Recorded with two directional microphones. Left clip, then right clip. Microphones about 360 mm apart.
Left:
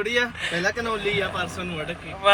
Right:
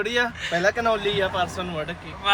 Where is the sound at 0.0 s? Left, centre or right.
Centre.